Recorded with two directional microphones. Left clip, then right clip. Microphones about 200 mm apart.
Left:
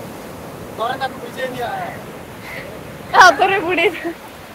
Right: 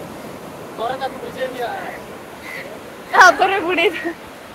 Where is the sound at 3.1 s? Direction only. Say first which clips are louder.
Left 1 dB; 5° left (ahead or behind).